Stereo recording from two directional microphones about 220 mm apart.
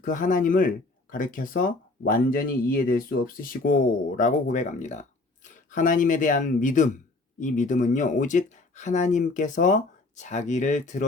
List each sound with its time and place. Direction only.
0.0 s speech: 35° left (ahead or behind)